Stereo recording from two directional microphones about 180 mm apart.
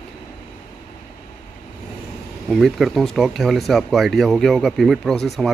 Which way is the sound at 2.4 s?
Centre (ahead or behind).